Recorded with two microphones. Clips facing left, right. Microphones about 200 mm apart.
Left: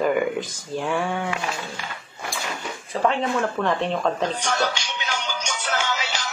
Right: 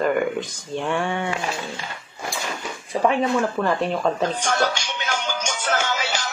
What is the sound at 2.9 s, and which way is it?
Speech, 10° right (ahead or behind).